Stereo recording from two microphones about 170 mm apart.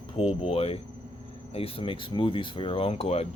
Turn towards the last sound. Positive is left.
turn(degrees=35)  # may be behind; listen again after turning